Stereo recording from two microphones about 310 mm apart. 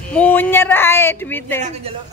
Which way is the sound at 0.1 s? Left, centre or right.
Centre.